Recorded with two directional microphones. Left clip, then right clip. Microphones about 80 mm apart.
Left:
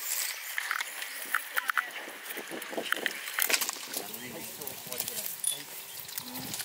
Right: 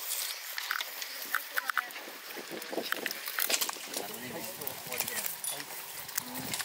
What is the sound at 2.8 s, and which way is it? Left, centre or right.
Boat, right.